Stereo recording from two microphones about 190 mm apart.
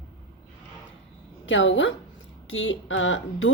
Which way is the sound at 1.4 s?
75° left (ahead or behind).